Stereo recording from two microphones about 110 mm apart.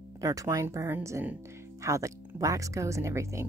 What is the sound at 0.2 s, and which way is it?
Speech, 30° right (ahead or behind).